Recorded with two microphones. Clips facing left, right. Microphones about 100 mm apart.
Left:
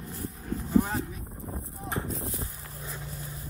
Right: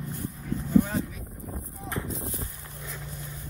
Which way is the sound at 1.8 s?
25° left (ahead or behind).